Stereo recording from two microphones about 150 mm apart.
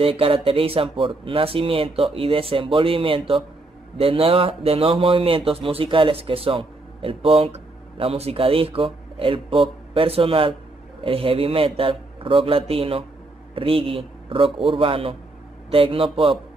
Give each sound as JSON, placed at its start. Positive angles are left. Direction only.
{"t": 0.0, "sound": "speech", "side_deg": -40}